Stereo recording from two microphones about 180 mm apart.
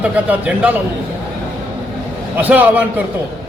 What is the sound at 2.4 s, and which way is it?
Speech, 10° right (ahead or behind).